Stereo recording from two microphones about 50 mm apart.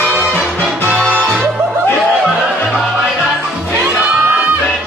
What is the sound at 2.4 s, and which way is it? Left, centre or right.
Music, centre.